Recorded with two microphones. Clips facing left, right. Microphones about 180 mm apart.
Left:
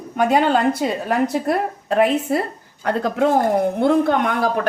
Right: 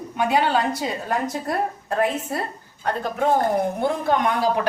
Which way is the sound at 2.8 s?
90° left.